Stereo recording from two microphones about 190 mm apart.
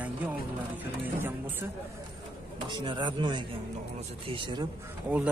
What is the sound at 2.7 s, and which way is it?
Speech, 25° right (ahead or behind).